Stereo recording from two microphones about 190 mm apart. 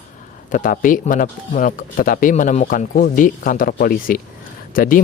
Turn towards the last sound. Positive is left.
turn(degrees=45)  # may be behind; listen again after turning